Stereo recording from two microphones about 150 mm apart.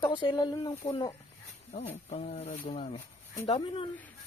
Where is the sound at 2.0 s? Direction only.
45° left (ahead or behind).